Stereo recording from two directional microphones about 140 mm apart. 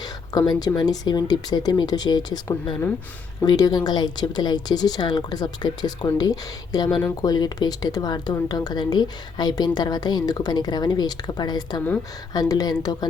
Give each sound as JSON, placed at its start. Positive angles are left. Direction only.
{"t": 0.0, "sound": "speech", "side_deg": 30}